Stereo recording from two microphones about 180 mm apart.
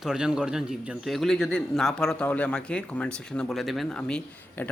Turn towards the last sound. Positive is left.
turn(degrees=5)  # may be behind; listen again after turning